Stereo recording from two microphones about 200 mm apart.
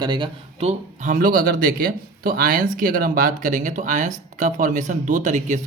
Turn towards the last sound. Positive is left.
turn(degrees=-35)  # may be behind; listen again after turning